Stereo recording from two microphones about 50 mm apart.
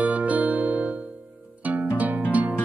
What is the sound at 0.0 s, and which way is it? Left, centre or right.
Music, right.